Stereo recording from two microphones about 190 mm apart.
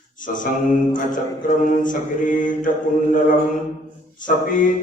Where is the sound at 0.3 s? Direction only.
45° left (ahead or behind).